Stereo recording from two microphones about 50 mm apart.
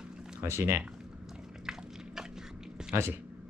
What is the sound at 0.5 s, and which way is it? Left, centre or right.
Speech, right.